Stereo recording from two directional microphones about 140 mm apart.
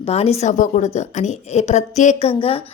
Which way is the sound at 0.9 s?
55° left (ahead or behind).